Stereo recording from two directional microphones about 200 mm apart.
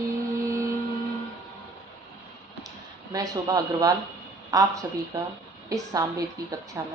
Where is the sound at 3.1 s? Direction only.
15° right (ahead or behind).